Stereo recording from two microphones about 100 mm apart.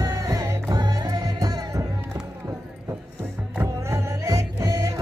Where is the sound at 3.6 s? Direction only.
30° right (ahead or behind).